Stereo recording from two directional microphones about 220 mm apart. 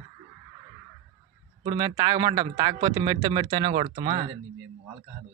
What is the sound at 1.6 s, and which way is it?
Speech, 20° right (ahead or behind).